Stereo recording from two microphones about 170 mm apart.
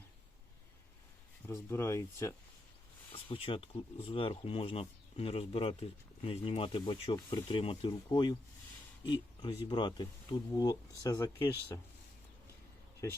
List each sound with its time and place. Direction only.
1.5 s speech: 15° left (ahead or behind)
3.1 s speech: 30° left (ahead or behind)